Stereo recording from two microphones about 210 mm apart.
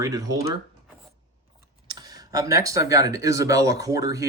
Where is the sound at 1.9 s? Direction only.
20° right (ahead or behind).